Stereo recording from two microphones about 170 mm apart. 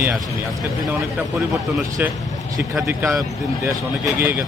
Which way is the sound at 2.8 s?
15° right (ahead or behind).